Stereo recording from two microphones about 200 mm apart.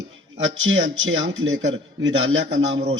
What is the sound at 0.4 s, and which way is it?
A man's voice, 75° right (ahead or behind).